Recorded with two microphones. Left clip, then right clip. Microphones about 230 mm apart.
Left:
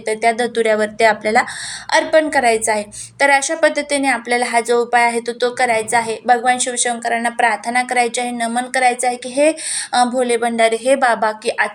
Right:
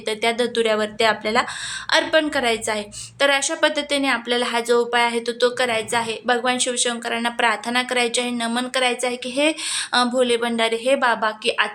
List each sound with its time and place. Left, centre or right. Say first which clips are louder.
0.1 s a woman's voice: left 5 dB; centre